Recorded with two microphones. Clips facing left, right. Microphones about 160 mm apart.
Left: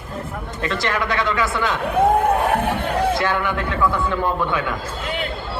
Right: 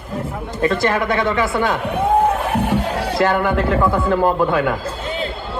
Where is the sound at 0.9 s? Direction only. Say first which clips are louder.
Right 4 dB; 25° right (ahead or behind).